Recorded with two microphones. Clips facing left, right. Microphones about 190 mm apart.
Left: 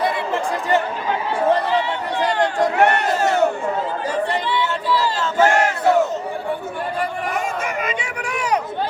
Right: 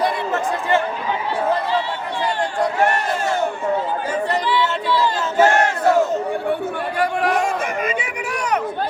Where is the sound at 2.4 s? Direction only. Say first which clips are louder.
Left 3 dB; 65° left (ahead or behind).